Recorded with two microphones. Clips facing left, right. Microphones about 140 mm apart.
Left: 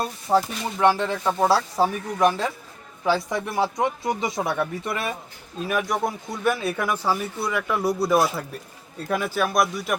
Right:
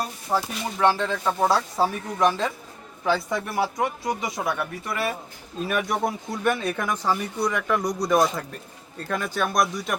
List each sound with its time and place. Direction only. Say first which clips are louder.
0.0 s speech: left 4 dB; 25° left (ahead or behind)
5.5 s speech: left 1 dB; centre (ahead or behind)